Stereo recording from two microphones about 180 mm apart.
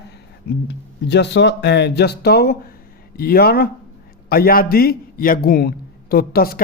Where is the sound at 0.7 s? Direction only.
80° left.